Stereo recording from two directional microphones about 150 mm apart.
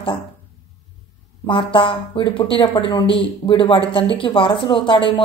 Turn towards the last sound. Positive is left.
turn(degrees=35)  # may be behind; listen again after turning